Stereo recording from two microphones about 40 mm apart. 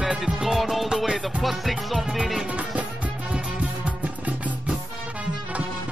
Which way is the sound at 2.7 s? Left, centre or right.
Right.